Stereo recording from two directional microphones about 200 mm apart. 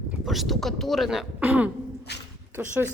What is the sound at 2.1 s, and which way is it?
Dog, 55° left (ahead or behind).